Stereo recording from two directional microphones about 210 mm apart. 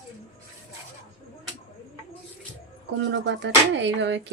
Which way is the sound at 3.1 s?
55° right (ahead or behind).